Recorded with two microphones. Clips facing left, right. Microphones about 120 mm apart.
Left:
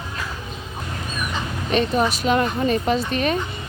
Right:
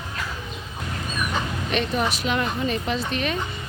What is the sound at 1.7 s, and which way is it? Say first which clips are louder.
Speech: left 5 dB; 40° left (ahead or behind).